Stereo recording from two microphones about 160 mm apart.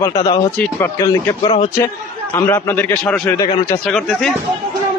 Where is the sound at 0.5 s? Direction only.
10° left (ahead or behind).